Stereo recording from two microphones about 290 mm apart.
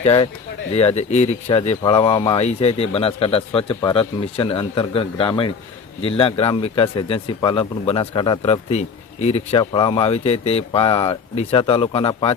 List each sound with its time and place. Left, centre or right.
0.0 s speech: left